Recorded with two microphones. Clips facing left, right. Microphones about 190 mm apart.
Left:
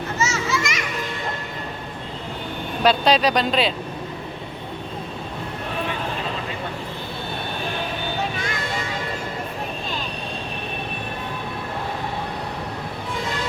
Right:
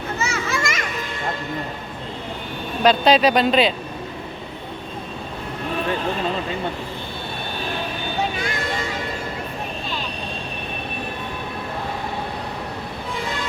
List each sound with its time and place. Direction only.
0.2 s children playing: 55° right (ahead or behind)
2.8 s speech: centre (ahead or behind)